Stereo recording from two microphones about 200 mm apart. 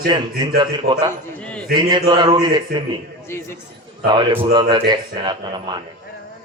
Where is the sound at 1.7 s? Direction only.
20° right (ahead or behind).